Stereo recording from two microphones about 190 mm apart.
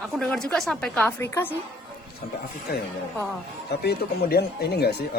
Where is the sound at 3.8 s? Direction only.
55° left (ahead or behind).